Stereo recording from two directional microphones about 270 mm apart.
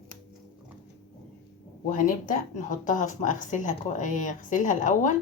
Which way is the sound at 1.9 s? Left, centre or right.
Left.